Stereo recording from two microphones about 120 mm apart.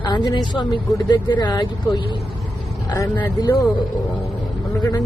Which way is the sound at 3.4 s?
30° left (ahead or behind).